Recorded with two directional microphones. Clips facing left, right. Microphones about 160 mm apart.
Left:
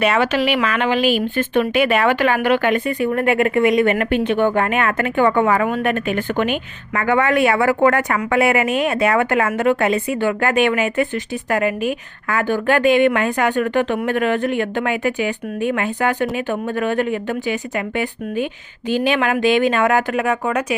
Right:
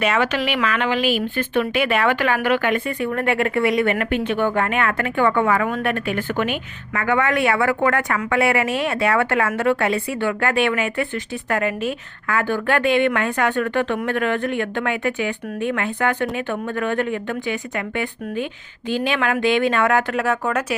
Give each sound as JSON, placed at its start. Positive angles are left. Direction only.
{"t": 0.0, "sound": "a woman's voice", "side_deg": 30}